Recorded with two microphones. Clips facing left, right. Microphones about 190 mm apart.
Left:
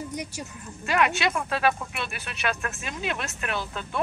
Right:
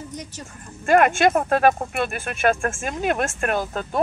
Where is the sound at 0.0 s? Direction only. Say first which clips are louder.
Left 1 dB; 10° left (ahead or behind).